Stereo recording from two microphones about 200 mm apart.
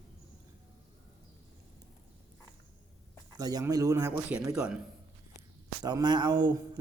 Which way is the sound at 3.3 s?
20° right (ahead or behind).